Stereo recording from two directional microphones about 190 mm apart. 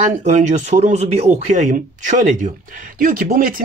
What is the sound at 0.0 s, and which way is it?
Speech, 40° right (ahead or behind).